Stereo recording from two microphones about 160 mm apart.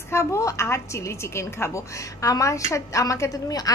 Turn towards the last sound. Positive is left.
turn(degrees=25)  # may be behind; listen again after turning